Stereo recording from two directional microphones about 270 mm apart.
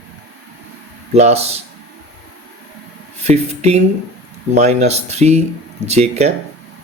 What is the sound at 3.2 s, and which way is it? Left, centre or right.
Speech, right.